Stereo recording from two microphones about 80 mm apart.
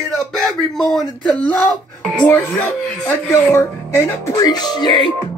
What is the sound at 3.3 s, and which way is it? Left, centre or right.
Speech, left.